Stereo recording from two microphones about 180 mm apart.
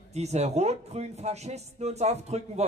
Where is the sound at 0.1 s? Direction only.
35° right (ahead or behind).